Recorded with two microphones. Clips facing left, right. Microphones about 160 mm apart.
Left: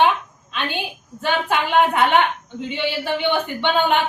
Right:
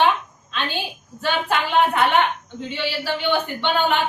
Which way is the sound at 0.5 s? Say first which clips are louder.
Left 1 dB; 15° left (ahead or behind).